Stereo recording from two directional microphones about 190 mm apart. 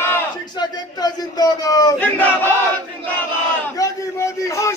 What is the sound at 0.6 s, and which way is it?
Speech, 20° left (ahead or behind).